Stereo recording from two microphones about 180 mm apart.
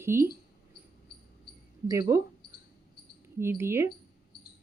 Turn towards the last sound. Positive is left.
turn(degrees=-15)  # may be behind; listen again after turning